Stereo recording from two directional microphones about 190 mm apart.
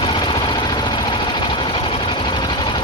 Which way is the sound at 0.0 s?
25° left (ahead or behind).